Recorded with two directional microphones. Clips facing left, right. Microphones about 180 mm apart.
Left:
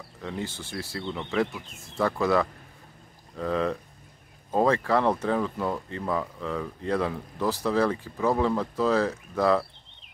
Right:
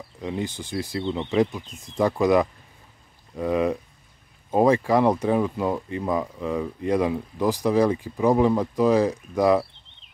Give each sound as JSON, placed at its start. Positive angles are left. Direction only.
{"t": 0.2, "sound": "speech", "side_deg": -15}